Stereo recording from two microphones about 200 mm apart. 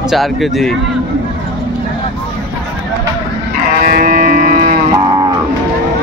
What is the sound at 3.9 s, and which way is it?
Music, 45° right (ahead or behind).